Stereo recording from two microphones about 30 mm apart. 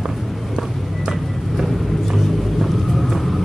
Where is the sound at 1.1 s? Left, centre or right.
Centre.